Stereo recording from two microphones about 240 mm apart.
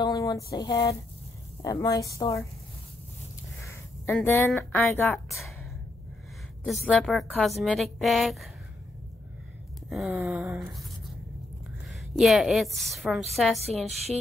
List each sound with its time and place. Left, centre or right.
0.0 s a sound: centre
1.6 s a woman's voice: centre
3.6 s speech: centre
6.6 s a woman's voice: centre
9.8 s a sound: centre
12.2 s a woman's voice: centre